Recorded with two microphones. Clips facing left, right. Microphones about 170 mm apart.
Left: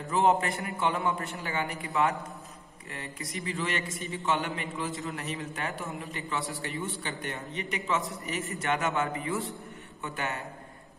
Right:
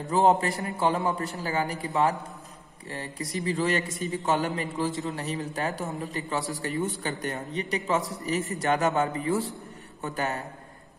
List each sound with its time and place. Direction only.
0.0 s a man's voice: 35° right (ahead or behind)
2.9 s a man's voice: 35° right (ahead or behind)